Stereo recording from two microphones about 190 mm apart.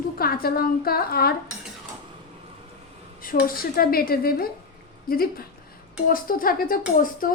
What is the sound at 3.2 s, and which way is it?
Speech, 50° left (ahead or behind).